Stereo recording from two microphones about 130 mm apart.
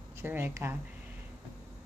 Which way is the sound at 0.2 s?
15° right (ahead or behind).